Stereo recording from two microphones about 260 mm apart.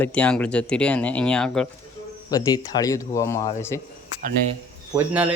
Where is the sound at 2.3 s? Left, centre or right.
Centre.